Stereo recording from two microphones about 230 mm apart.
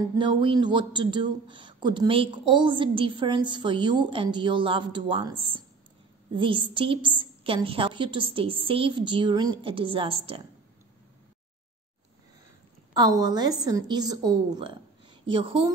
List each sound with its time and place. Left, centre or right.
0.0 s speech: right
12.9 s a woman's voice: centre